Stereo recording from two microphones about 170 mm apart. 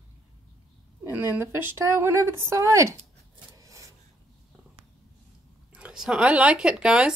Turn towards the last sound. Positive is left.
turn(degrees=-5)  # may be behind; listen again after turning